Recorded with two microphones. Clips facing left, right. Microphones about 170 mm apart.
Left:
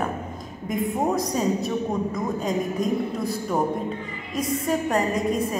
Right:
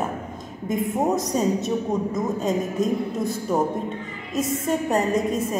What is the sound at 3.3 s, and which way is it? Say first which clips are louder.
A man's voice: right 2 dB; centre (ahead or behind).